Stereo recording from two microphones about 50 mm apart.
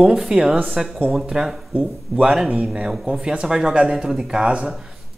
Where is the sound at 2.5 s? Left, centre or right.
Right.